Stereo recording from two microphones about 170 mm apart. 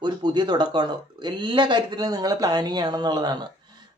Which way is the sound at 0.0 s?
25° right (ahead or behind).